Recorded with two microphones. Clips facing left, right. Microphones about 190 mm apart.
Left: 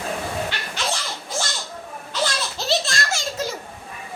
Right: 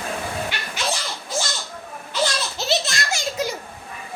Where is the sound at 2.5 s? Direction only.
20° right (ahead or behind).